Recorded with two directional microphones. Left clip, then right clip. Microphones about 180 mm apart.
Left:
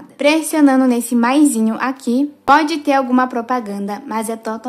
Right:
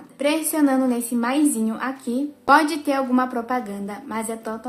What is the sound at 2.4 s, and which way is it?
Speech, 25° left (ahead or behind).